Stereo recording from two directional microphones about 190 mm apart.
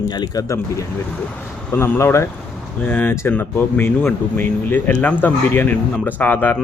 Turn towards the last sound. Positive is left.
turn(degrees=10)  # may be behind; listen again after turning